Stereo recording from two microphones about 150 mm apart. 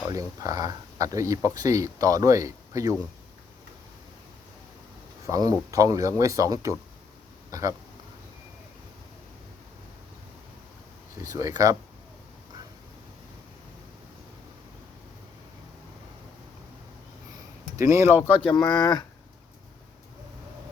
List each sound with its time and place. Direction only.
0.1 s speech: 25° right (ahead or behind)
5.2 s speech: 25° right (ahead or behind)
11.2 s speech: 20° right (ahead or behind)
17.7 s speech: 20° right (ahead or behind)
18.2 s speech: 5° right (ahead or behind)
18.4 s speech: 30° left (ahead or behind)